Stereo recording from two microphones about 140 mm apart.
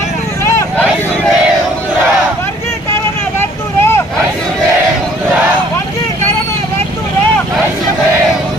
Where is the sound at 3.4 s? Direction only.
20° left (ahead or behind).